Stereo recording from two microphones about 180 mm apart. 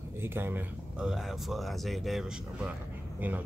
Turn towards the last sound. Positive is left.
turn(degrees=-10)  # may be behind; listen again after turning